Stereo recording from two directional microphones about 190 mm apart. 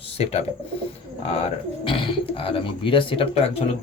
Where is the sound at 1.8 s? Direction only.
25° left (ahead or behind).